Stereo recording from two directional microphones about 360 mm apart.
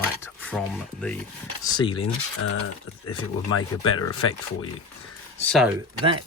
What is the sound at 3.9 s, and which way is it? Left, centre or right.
Speech, left.